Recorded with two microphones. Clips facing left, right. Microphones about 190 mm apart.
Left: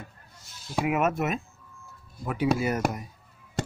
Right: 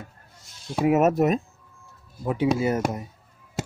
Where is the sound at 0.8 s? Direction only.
40° right (ahead or behind).